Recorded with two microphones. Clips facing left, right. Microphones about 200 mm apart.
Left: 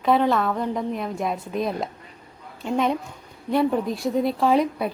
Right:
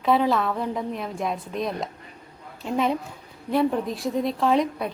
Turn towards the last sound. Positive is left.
turn(degrees=0)  # may be behind; listen again after turning